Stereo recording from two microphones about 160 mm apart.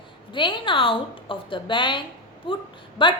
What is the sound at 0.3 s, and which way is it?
A woman's voice, 30° left (ahead or behind).